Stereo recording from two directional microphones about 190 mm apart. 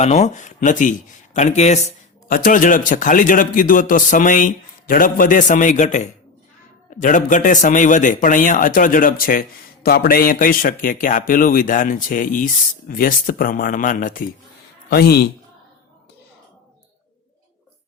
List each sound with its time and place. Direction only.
0.0 s a man's voice: 35° left (ahead or behind); by 15.3 s 55° left (ahead or behind)